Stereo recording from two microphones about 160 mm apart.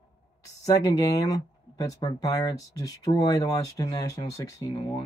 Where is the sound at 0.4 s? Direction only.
20° left (ahead or behind).